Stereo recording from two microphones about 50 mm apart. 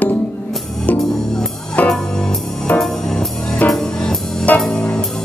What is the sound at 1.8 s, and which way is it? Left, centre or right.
Music, left.